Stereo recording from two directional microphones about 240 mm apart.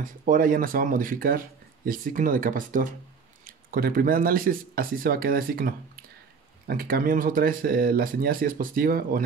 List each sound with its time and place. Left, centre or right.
0.0 s speech: right